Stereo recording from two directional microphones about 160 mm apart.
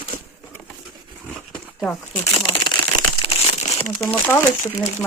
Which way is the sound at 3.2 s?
35° left (ahead or behind).